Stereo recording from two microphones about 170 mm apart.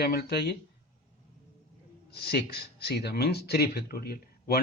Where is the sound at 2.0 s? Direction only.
70° left (ahead or behind).